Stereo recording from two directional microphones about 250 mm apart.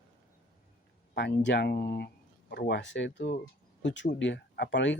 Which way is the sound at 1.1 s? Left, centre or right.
Left.